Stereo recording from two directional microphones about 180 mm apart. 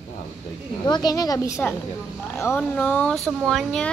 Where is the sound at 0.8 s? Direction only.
20° left (ahead or behind).